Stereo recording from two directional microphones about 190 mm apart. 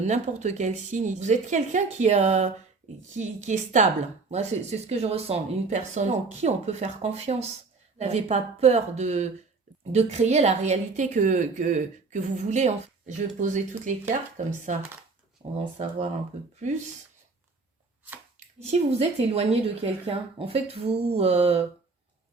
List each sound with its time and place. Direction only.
0.0 s speech: 35° right (ahead or behind)
18.3 s speech: 35° right (ahead or behind)